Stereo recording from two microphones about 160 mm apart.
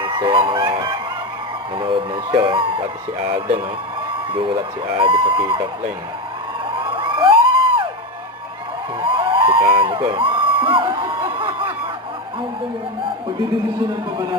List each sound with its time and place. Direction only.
0.0 s music: 30° right (ahead or behind)
1.8 s a sound: 35° right (ahead or behind)
2.4 s speech: 30° right (ahead or behind)
4.3 s speech: 35° right (ahead or behind)
6.7 s crowd: 30° right (ahead or behind)
9.0 s a sound: 30° right (ahead or behind)